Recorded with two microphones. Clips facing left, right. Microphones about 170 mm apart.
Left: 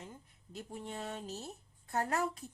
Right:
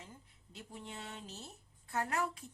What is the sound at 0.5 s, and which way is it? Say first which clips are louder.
Speech: left 5 dB; 45° left (ahead or behind).